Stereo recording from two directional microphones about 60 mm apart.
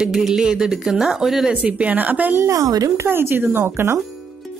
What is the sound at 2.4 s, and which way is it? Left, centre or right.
Speech, right.